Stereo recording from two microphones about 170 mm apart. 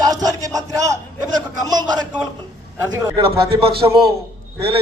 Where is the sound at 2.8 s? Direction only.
20° right (ahead or behind).